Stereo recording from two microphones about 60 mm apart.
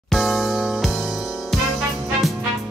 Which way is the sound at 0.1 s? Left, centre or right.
Centre.